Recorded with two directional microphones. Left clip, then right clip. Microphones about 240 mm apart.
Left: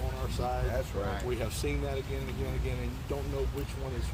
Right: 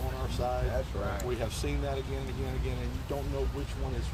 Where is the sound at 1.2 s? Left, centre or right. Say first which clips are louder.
Even; centre.